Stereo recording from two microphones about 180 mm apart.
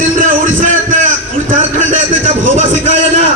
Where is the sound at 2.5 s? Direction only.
40° right (ahead or behind).